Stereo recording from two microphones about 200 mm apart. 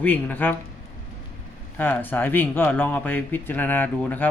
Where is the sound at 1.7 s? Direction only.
10° left (ahead or behind).